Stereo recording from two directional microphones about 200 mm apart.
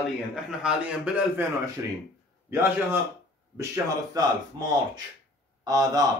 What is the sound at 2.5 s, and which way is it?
A man's voice, 10° right (ahead or behind).